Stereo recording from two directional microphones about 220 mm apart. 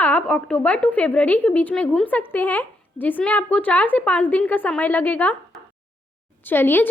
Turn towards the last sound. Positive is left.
turn(degrees=10)  # may be behind; listen again after turning